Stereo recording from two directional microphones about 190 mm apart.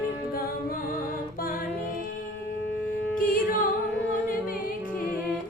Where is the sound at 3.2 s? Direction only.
45° left (ahead or behind).